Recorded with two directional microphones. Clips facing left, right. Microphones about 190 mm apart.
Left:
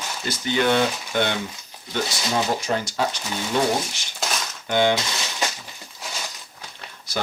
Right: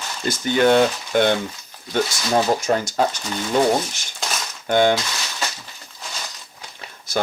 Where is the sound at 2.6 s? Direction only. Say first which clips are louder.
Right 4 dB; 45° right (ahead or behind).